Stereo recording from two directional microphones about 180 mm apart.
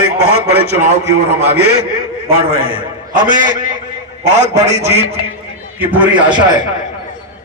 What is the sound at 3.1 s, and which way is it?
A man's voice, 45° right (ahead or behind).